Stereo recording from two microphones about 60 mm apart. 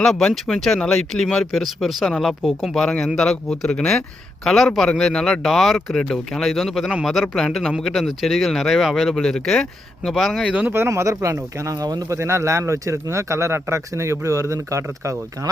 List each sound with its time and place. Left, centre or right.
0.0 s speech: centre
2.4 s speech: centre
3.7 s speech: centre
4.4 s speech: centre
10.4 s speech: centre
10.8 s speech: right
11.7 s speech: right
12.1 s speech: right